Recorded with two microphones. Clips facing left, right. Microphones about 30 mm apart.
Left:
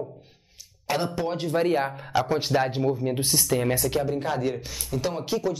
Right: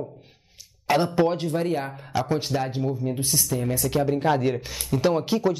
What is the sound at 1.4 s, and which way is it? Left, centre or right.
Speech, centre.